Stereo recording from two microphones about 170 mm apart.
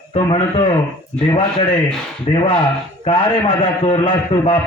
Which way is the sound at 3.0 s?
30° left (ahead or behind).